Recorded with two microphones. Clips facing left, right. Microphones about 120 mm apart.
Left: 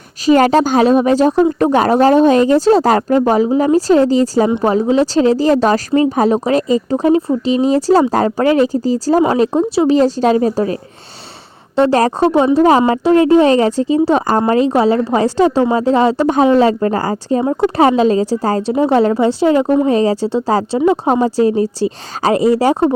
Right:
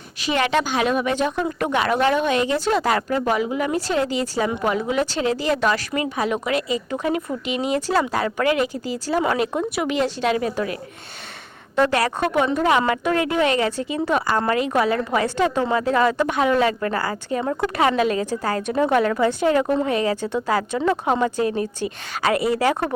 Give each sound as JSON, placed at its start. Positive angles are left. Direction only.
{"t": 0.3, "sound": "speech", "side_deg": 40}
{"t": 11.8, "sound": "a woman's voice", "side_deg": 35}